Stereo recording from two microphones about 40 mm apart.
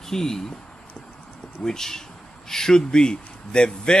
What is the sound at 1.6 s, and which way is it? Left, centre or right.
Speech, centre.